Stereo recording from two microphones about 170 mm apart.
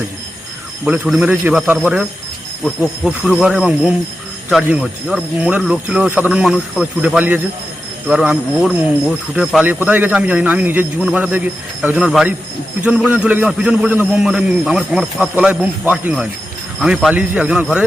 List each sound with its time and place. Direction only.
0.9 s a man's voice: 5° right (ahead or behind)